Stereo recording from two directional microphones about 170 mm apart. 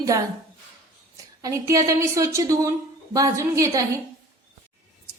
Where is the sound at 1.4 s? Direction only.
20° right (ahead or behind).